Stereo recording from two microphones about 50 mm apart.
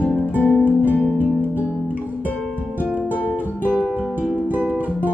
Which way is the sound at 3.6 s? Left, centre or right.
Right.